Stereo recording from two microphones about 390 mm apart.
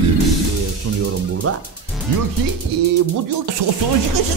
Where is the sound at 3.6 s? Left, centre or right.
Right.